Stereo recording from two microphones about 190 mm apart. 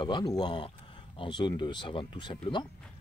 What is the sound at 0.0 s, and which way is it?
Speech, 20° left (ahead or behind).